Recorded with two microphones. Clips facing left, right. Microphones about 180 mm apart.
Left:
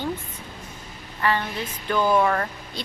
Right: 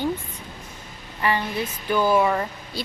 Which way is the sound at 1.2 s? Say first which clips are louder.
Right 1 dB; 15° right (ahead or behind).